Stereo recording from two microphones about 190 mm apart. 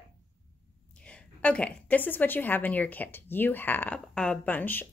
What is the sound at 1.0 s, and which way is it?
A woman's voice, 5° left (ahead or behind).